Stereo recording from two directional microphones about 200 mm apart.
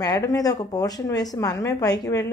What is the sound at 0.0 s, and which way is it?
Speech, 15° left (ahead or behind).